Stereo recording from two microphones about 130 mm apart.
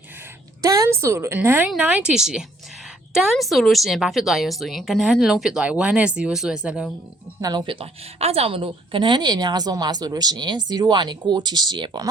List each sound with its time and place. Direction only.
0.6 s a woman's voice: 25° right (ahead or behind); by 6.9 s 5° right (ahead or behind)
7.4 s a woman's voice: 35° right (ahead or behind)